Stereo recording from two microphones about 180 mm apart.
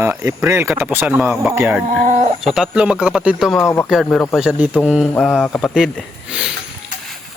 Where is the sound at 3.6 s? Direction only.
15° left (ahead or behind).